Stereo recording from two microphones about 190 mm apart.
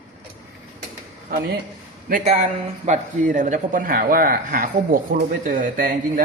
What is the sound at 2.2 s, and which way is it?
A man's voice, 35° right (ahead or behind).